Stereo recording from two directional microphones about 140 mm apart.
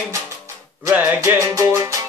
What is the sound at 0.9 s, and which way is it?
Music, 15° right (ahead or behind).